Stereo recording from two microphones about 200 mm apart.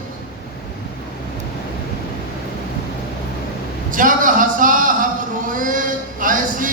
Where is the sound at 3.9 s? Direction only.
40° right (ahead or behind).